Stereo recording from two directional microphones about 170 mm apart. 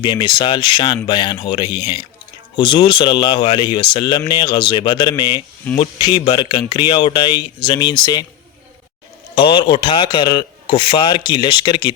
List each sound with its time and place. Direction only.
0.0 s a man's voice: 25° left (ahead or behind)
9.3 s a man's voice: 30° left (ahead or behind)